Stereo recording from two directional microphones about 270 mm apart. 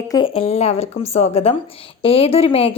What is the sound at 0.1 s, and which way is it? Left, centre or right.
A woman's voice, centre.